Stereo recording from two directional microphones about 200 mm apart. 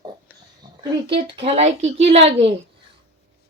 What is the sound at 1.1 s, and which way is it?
A child's voice, 25° right (ahead or behind).